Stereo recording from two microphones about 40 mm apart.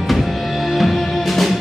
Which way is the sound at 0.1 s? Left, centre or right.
Centre.